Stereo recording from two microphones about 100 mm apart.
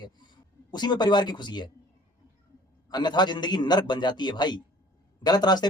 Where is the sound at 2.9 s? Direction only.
45° left (ahead or behind).